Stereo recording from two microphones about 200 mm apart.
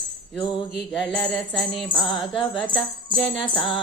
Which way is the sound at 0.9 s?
Centre (ahead or behind).